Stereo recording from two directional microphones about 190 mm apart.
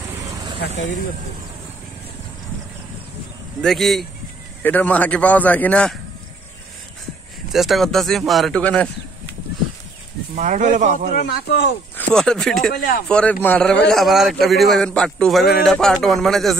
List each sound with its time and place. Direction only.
0.6 s speech: 80° left
3.6 s a man's voice: centre (ahead or behind)
7.5 s a man's voice: centre (ahead or behind)
10.3 s speech: 40° right (ahead or behind)
11.1 s speech: 55° left (ahead or behind)
12.1 s a man's voice: 5° left (ahead or behind)
12.7 s speech: 55° left (ahead or behind)
13.1 s a man's voice: 5° left (ahead or behind)